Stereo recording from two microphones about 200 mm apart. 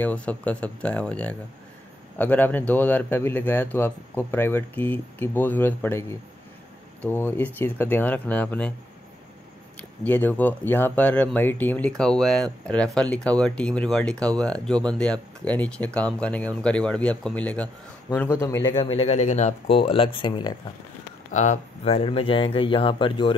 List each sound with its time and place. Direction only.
0.0 s speech: 5° left (ahead or behind)
9.8 s speech: 10° left (ahead or behind)
21.3 s speech: 40° left (ahead or behind)